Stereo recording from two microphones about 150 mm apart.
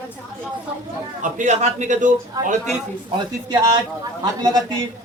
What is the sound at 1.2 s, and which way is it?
A man's voice, 55° right (ahead or behind).